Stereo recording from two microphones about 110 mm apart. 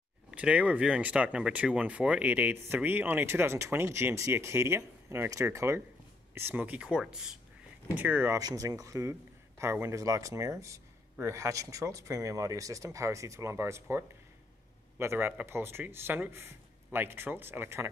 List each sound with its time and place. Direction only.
0.3 s speech: 10° right (ahead or behind)
8.4 s speech: 35° right (ahead or behind)